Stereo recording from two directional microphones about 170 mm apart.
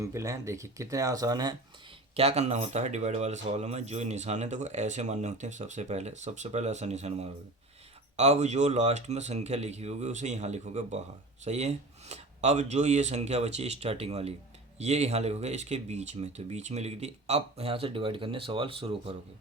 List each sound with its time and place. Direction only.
0.0 s speech: 20° right (ahead or behind)
2.1 s speech: 40° right (ahead or behind)